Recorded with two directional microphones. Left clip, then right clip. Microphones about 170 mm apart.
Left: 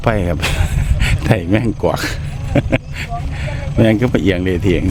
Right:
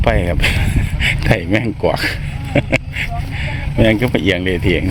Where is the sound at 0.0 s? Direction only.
30° left (ahead or behind).